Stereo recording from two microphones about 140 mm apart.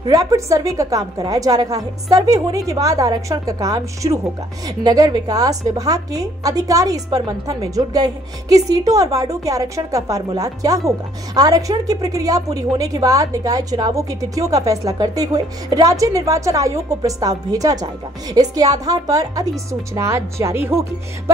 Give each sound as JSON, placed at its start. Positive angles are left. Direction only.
{"t": 0.0, "sound": "a woman's voice", "side_deg": -25}